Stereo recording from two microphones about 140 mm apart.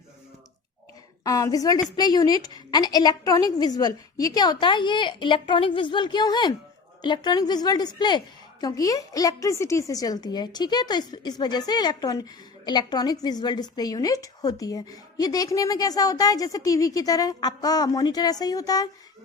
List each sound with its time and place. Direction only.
1.2 s a woman's voice: 25° left (ahead or behind)